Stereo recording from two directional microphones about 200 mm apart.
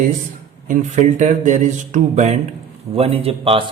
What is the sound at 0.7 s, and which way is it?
A man's voice, 35° right (ahead or behind).